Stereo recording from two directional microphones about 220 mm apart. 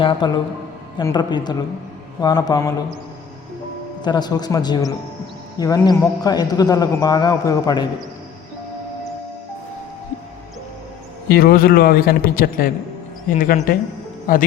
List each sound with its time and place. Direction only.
0.0 s a woman's voice: 20° left (ahead or behind)
4.0 s a man's voice: 20° left (ahead or behind)
11.3 s a man's voice: 45° left (ahead or behind)